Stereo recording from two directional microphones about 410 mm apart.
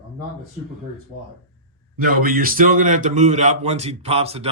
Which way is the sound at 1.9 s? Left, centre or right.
Right.